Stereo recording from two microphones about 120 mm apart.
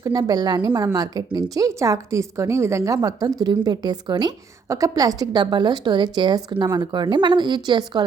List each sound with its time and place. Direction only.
0.0 s a woman's voice: 30° right (ahead or behind)